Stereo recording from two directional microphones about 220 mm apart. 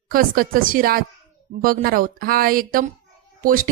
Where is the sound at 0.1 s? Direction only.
40° right (ahead or behind).